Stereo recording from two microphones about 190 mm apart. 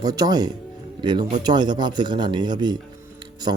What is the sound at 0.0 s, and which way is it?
Speech, 20° right (ahead or behind).